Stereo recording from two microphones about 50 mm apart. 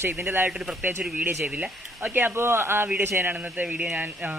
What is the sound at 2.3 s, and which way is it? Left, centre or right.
A man's voice, right.